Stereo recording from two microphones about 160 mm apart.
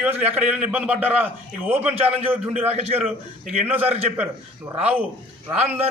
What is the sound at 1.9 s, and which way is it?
Speech, 40° right (ahead or behind).